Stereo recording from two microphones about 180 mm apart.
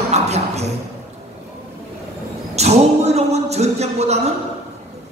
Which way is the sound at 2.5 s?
35° right (ahead or behind).